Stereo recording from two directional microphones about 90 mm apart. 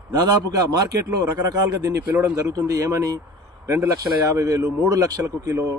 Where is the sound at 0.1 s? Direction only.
45° right (ahead or behind).